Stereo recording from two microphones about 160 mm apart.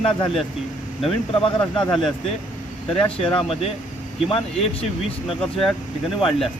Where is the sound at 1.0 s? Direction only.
35° left (ahead or behind).